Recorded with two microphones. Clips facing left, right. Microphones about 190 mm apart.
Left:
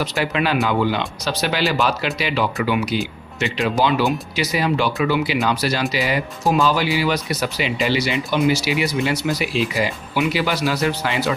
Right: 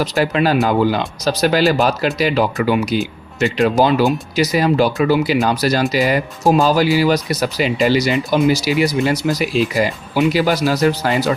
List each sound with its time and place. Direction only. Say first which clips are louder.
0.0 s speech: right 5 dB; 40° right (ahead or behind)